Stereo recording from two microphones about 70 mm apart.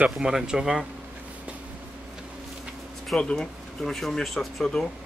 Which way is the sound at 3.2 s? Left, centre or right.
Centre.